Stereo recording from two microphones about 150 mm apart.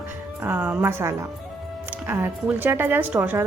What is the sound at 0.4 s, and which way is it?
A woman's voice, 10° right (ahead or behind).